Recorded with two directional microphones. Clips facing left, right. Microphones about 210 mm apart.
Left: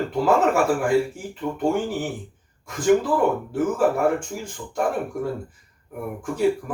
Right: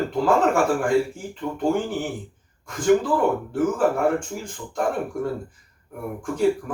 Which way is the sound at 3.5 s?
5° left (ahead or behind).